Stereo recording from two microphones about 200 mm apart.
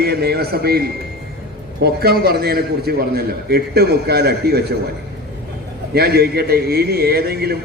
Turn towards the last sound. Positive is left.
turn(degrees=-50)  # may be behind; listen again after turning